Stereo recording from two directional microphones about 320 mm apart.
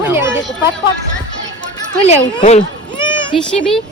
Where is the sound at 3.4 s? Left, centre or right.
Centre.